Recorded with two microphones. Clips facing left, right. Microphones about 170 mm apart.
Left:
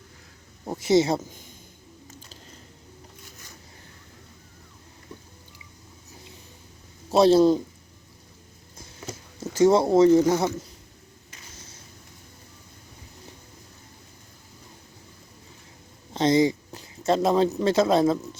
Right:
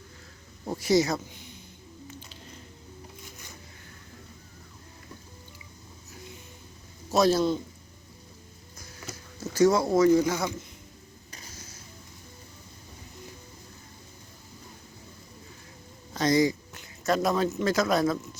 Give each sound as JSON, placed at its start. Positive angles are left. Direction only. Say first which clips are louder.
{"t": 0.7, "sound": "speech", "louder": "left 3 dB", "side_deg": 25}
{"t": 1.3, "sound": "a sound", "louder": "even", "side_deg": 45}
{"t": 7.1, "sound": "speech", "louder": "left 6 dB", "side_deg": 30}
{"t": 9.5, "sound": "speech", "louder": "left 3 dB", "side_deg": 25}
{"t": 16.1, "sound": "speech", "louder": "left 3 dB", "side_deg": 25}